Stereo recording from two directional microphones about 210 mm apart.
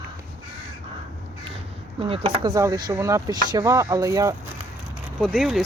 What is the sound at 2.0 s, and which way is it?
Speech, 25° right (ahead or behind).